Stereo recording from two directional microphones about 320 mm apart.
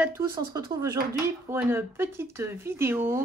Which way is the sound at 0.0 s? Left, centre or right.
Centre.